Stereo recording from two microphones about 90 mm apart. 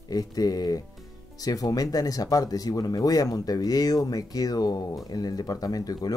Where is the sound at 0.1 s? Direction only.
45° left (ahead or behind).